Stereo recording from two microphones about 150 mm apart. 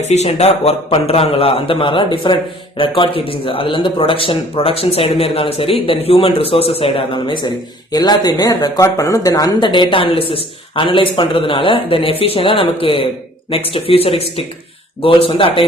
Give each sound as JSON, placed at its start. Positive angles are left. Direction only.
{"t": 0.1, "sound": "a man's voice", "side_deg": 45}